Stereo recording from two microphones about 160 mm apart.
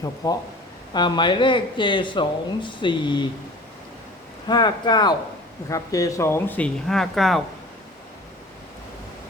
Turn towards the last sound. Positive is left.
turn(degrees=0)  # may be behind; listen again after turning